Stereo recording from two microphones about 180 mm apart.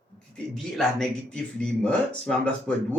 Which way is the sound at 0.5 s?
Centre (ahead or behind).